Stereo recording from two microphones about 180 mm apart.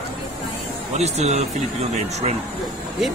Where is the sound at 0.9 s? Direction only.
40° right (ahead or behind).